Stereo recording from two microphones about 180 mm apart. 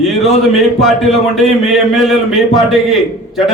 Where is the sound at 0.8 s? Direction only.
Centre (ahead or behind).